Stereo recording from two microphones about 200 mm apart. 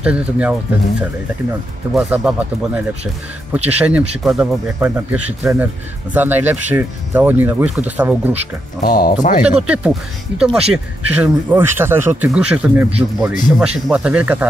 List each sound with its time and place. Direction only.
0.0 s speech: 5° right (ahead or behind)
8.8 s speech: 45° left (ahead or behind)
9.4 s speech: 5° right (ahead or behind)